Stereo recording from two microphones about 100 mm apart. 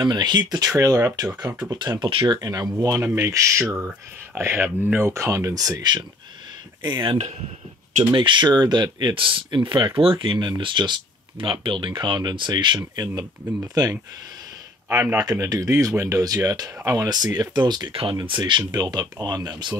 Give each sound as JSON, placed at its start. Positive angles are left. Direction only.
{"t": 0.0, "sound": "speech", "side_deg": -45}
{"t": 0.5, "sound": "speech", "side_deg": -35}
{"t": 2.0, "sound": "speech", "side_deg": -60}
{"t": 2.3, "sound": "speech", "side_deg": -40}
{"t": 4.4, "sound": "speech", "side_deg": -20}
{"t": 5.1, "sound": "speech", "side_deg": -30}
{"t": 6.8, "sound": "speech", "side_deg": -50}
{"t": 14.9, "sound": "speech", "side_deg": -25}
{"t": 15.1, "sound": "speech", "side_deg": -35}
{"t": 18.7, "sound": "speech", "side_deg": -45}